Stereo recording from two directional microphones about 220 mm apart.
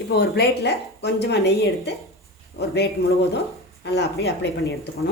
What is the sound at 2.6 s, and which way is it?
Speech, 50° left (ahead or behind).